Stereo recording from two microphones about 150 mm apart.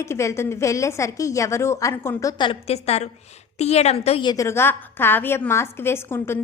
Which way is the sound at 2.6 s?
45° left (ahead or behind).